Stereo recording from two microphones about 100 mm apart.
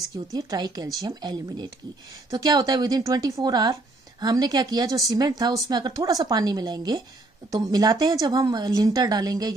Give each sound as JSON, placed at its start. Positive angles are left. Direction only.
{"t": 0.3, "sound": "a woman's voice", "side_deg": -40}